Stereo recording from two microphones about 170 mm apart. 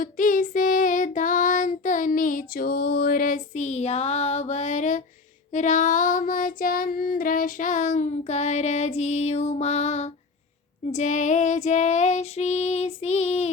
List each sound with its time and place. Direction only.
0.0 s child singing: 55° left (ahead or behind)
10.9 s female singing: 45° left (ahead or behind)